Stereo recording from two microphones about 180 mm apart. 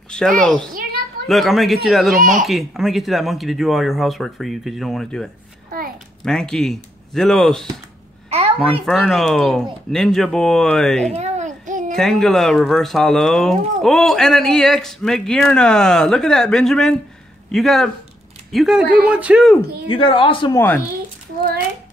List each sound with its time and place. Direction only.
0.1 s speech: 5° left (ahead or behind)
2.1 s speech: 50° right (ahead or behind)
2.4 s speech: centre (ahead or behind)
8.8 s speech: centre (ahead or behind)
11.1 s a sound: 40° right (ahead or behind)
11.9 s speech: centre (ahead or behind)
19.9 s speech: 30° left (ahead or behind)
20.5 s speech: 10° left (ahead or behind)